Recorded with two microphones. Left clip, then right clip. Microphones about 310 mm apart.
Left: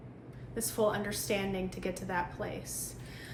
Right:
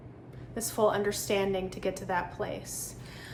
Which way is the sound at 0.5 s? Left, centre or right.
Centre.